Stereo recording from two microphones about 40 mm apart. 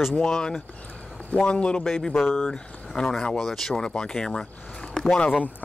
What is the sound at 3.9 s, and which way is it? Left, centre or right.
Speech, centre.